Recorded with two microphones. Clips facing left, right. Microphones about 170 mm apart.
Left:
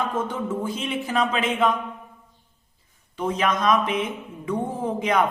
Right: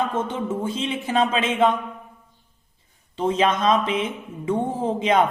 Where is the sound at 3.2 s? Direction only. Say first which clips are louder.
Right 3 dB; 25° right (ahead or behind).